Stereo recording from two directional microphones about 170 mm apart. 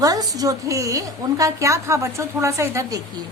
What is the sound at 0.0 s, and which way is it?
A woman's voice, 20° right (ahead or behind).